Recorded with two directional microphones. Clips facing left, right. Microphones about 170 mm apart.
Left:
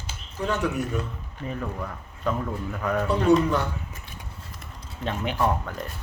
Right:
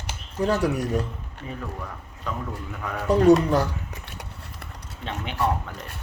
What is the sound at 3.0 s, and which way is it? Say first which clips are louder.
Speech: right 4 dB; 40° right (ahead or behind).